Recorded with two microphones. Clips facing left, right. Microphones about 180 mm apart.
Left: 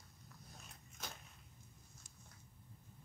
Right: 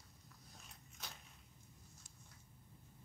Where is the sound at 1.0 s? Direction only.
45° left (ahead or behind).